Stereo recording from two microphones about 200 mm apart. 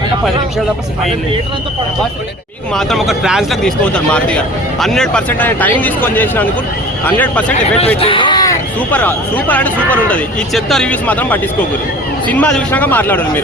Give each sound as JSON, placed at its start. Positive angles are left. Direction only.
{"t": 2.7, "sound": "a man's voice", "side_deg": 0}
{"t": 8.0, "sound": "speech", "side_deg": 25}
{"t": 8.9, "sound": "speech", "side_deg": 10}